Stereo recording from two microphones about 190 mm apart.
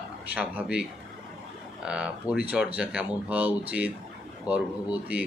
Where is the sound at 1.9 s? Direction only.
5° right (ahead or behind).